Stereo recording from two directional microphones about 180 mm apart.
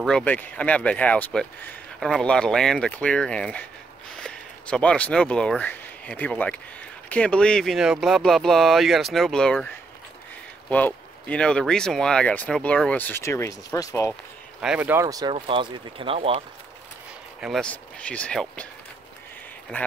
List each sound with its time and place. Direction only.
0.0 s speech: 5° left (ahead or behind)
10.7 s speech: 10° left (ahead or behind)
14.6 s speech: 5° right (ahead or behind)
15.3 s speech: 30° right (ahead or behind)
17.4 s speech: centre (ahead or behind)
19.7 s speech: 10° left (ahead or behind)